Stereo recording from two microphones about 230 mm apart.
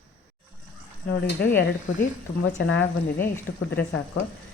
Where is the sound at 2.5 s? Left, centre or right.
Left.